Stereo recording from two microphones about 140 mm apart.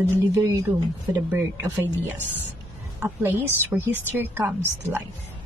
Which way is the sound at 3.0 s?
15° right (ahead or behind).